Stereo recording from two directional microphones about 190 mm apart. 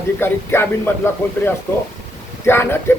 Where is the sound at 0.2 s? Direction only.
10° left (ahead or behind).